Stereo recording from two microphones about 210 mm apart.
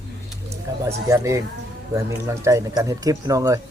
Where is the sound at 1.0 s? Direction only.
15° right (ahead or behind).